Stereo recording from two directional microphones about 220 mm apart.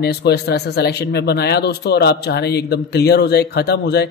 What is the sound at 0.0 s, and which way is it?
Speech, 50° left (ahead or behind).